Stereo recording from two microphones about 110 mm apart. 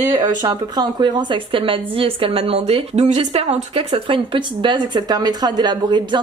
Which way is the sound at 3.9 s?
55° right (ahead or behind).